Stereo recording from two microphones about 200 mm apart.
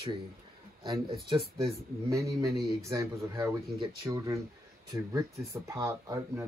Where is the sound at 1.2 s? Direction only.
25° right (ahead or behind).